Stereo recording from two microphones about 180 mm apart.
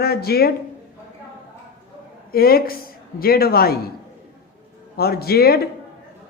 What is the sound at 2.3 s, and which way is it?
A woman's voice, 55° left (ahead or behind).